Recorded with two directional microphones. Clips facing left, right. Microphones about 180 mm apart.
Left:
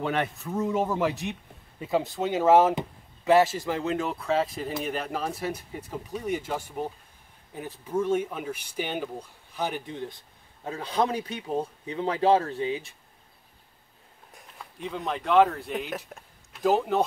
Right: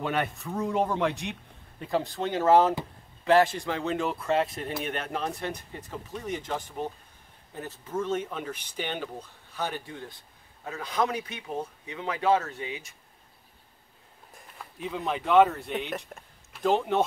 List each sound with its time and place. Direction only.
0.0 s speech: centre (ahead or behind); by 12.9 s 35° left (ahead or behind)
14.3 s speech: centre (ahead or behind)